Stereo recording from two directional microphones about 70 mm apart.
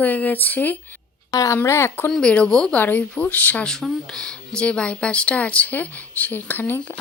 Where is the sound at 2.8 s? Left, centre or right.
Left.